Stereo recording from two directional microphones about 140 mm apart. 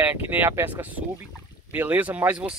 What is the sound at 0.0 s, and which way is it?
Speech, 15° right (ahead or behind).